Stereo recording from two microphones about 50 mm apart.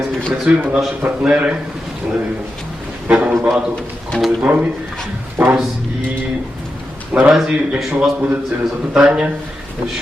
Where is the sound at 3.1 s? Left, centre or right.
Right.